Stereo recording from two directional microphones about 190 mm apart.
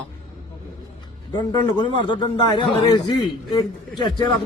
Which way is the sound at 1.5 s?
25° left (ahead or behind).